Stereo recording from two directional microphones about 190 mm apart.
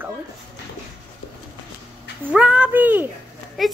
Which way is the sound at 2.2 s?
5° right (ahead or behind).